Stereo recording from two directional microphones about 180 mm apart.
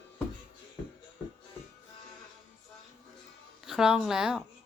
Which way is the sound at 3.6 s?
5° right (ahead or behind).